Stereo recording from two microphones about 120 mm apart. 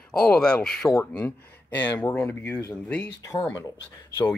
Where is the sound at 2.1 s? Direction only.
20° left (ahead or behind).